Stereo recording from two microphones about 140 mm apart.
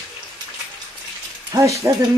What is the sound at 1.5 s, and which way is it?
Speech, 20° right (ahead or behind).